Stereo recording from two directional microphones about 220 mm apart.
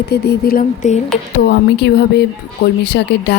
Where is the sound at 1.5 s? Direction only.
50° left (ahead or behind).